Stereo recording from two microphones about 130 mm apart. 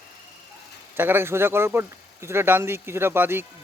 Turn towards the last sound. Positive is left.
turn(degrees=-15)  # may be behind; listen again after turning